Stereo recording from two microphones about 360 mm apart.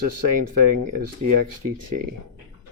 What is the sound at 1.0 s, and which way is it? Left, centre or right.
Speech, right.